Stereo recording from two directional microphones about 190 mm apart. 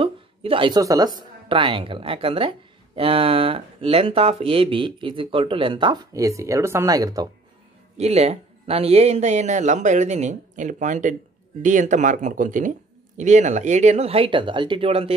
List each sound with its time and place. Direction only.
0.0 s a woman's voice: 30° right (ahead or behind)
8.0 s speech: 35° right (ahead or behind)